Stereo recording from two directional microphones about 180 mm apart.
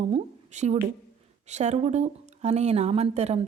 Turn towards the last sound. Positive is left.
turn(degrees=-35)  # may be behind; listen again after turning